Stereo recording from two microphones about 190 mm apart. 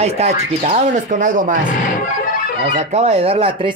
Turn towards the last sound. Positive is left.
turn(degrees=-30)  # may be behind; listen again after turning